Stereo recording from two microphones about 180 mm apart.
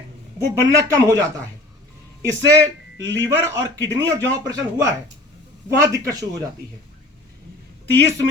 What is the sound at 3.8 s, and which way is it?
Speech, 15° right (ahead or behind).